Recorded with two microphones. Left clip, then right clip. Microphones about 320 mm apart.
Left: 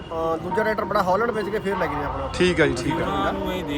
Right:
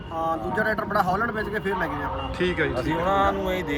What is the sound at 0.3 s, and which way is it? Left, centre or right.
Speech, centre.